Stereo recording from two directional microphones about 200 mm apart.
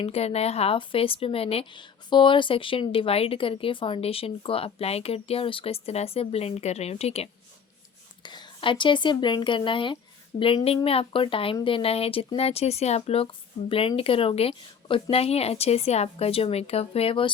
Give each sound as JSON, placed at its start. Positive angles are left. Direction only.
{"t": 0.0, "sound": "speech", "side_deg": 30}